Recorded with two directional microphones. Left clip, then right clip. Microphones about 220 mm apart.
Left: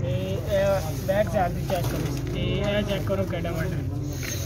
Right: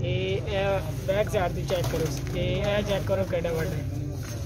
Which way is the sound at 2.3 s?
50° right (ahead or behind).